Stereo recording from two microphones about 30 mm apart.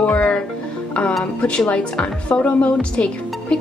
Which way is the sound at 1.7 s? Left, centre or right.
Left.